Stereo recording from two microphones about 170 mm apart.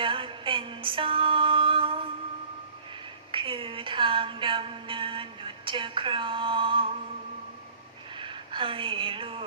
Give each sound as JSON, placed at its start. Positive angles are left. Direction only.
{"t": 0.0, "sound": "music", "side_deg": -30}
{"t": 3.3, "sound": "music", "side_deg": -30}
{"t": 8.1, "sound": "speech", "side_deg": -30}